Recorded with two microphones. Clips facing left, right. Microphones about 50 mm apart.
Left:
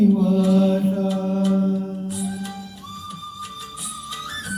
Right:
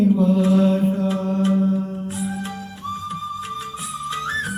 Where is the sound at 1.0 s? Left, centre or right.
Right.